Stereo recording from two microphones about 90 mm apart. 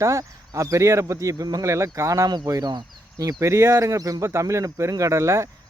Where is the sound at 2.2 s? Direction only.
45° right (ahead or behind).